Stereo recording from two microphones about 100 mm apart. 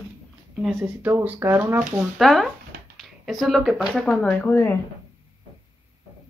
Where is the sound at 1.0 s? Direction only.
15° right (ahead or behind).